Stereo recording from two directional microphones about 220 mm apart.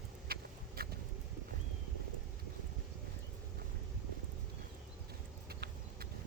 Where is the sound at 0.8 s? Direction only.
45° right (ahead or behind).